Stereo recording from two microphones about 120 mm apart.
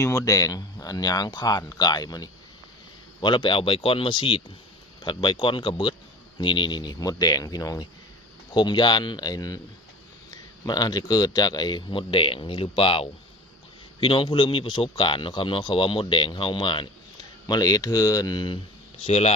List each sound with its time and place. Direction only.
0.0 s a man's voice: 25° left (ahead or behind); by 16.9 s 45° left (ahead or behind)
17.4 s a man's voice: 35° left (ahead or behind)
19.0 s speech: 60° left (ahead or behind)